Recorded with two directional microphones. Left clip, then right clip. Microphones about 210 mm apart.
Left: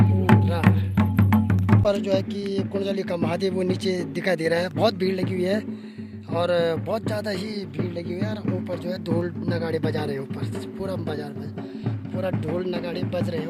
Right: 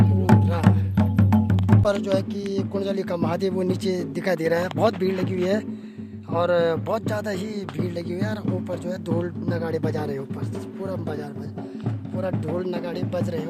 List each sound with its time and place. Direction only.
0.6 s music: 25° right (ahead or behind)
1.8 s speech: 5° left (ahead or behind)
8.1 s speech: 10° right (ahead or behind)
8.7 s speech: centre (ahead or behind)
12.1 s speech: centre (ahead or behind)